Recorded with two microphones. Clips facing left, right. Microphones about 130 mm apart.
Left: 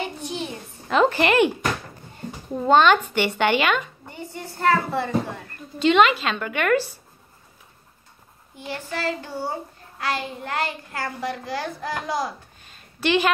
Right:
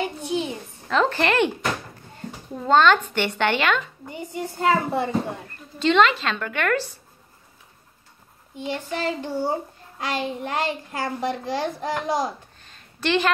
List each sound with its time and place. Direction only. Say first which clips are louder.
0.2 s a sound: right 4 dB; 15° right (ahead or behind)
0.8 s a woman's voice: left 2 dB; 15° left (ahead or behind)
2.5 s a woman's voice: left 1 dB; 15° left (ahead or behind)
4.1 s a woman's voice: right 6 dB; 15° right (ahead or behind)
5.8 s a woman's voice: left 1 dB; 10° left (ahead or behind)
8.5 s a child's voice: right 3 dB; 20° right (ahead or behind)
12.6 s a sound: left 2 dB; 5° left (ahead or behind)